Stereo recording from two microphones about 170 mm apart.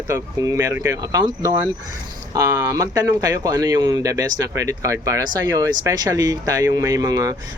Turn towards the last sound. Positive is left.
turn(degrees=-20)  # may be behind; listen again after turning